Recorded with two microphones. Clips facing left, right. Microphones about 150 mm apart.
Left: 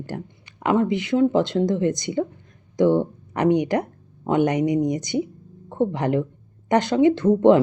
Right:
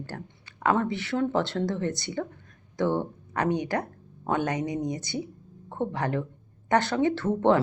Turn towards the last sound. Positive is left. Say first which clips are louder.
# left 7 dB
turn(degrees=15)  # may be behind; listen again after turning